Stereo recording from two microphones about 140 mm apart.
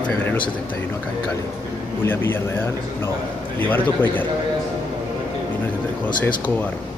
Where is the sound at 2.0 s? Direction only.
15° left (ahead or behind).